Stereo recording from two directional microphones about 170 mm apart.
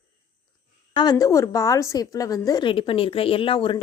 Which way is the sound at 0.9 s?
20° left (ahead or behind).